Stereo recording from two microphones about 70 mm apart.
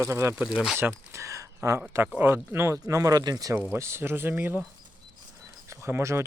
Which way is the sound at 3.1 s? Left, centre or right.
Right.